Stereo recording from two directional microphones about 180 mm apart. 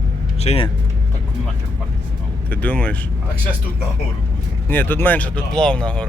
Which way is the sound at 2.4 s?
10° left (ahead or behind).